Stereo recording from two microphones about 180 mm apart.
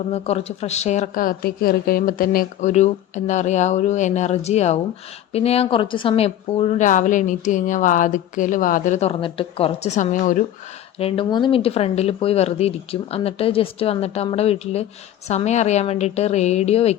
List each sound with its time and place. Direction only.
0.1 s a woman's voice: 35° left (ahead or behind)
10.9 s a woman's voice: 30° left (ahead or behind)